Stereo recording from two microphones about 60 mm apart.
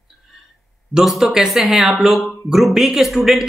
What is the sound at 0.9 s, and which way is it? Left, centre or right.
Speech, centre.